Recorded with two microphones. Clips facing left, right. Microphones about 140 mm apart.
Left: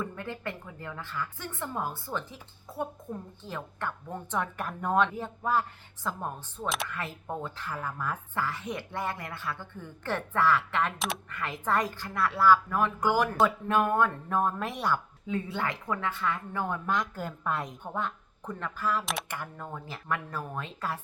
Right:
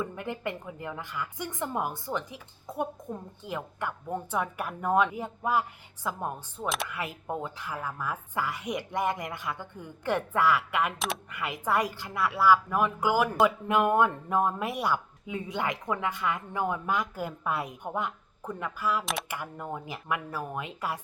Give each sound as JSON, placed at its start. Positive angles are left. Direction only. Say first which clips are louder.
{"t": 0.0, "sound": "a woman's voice", "louder": "right 2 dB", "side_deg": -15}
{"t": 10.9, "sound": "speech", "louder": "right 1 dB", "side_deg": 0}
{"t": 11.3, "sound": "a woman's voice", "louder": "right 1 dB", "side_deg": -15}